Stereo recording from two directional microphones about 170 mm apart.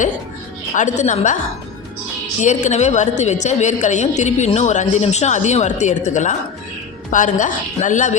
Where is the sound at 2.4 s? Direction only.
45° left (ahead or behind).